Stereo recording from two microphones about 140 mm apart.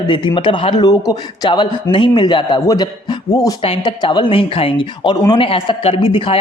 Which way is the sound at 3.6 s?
35° left (ahead or behind).